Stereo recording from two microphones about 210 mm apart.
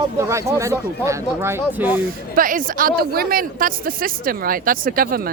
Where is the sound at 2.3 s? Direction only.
40° right (ahead or behind).